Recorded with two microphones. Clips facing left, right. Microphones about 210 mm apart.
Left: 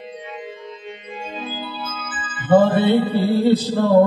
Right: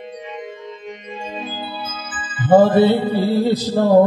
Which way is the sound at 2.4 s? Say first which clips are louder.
Right 3 dB; 40° right (ahead or behind).